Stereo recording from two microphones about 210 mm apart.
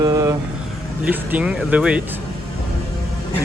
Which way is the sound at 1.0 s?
5° right (ahead or behind).